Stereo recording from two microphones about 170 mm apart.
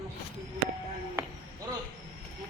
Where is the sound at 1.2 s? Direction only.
20° right (ahead or behind).